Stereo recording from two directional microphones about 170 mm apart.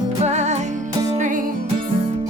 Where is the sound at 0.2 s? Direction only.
40° right (ahead or behind).